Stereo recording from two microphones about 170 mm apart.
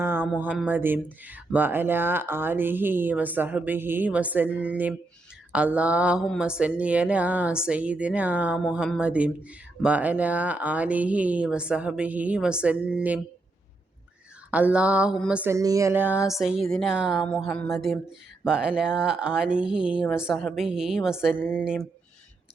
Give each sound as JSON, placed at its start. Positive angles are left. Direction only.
{"t": 0.0, "sound": "music", "side_deg": -10}
{"t": 0.6, "sound": "speech", "side_deg": -10}
{"t": 14.5, "sound": "speech", "side_deg": -10}
{"t": 15.5, "sound": "speech", "side_deg": -20}
{"t": 16.3, "sound": "speech", "side_deg": 0}